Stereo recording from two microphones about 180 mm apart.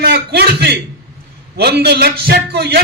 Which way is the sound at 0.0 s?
65° right (ahead or behind).